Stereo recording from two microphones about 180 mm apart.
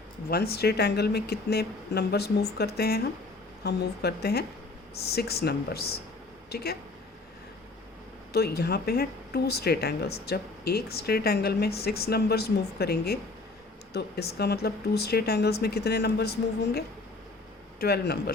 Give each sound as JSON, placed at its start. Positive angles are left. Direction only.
{"t": 0.3, "sound": "speech", "side_deg": 60}
{"t": 8.3, "sound": "speech", "side_deg": 60}